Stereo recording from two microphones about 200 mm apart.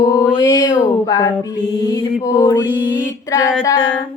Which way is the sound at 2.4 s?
15° left (ahead or behind).